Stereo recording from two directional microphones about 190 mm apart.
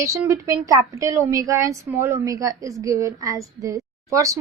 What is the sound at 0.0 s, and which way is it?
A woman's voice, 15° right (ahead or behind).